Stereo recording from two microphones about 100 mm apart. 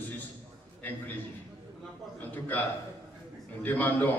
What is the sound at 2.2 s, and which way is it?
Speech, 15° left (ahead or behind).